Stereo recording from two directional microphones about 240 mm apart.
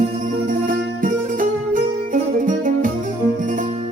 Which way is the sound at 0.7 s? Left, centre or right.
Right.